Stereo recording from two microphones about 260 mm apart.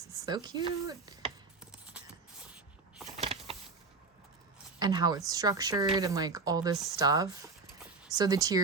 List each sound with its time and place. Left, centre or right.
0.1 s speech: centre
3.2 s a sound: right
4.8 s speech: centre